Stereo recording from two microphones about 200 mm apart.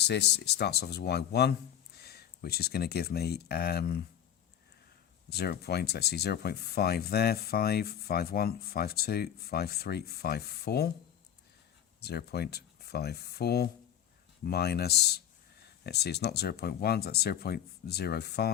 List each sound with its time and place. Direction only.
0.0 s speech: 55° left (ahead or behind)
5.3 s speech: 55° left (ahead or behind)
12.0 s speech: 55° left (ahead or behind)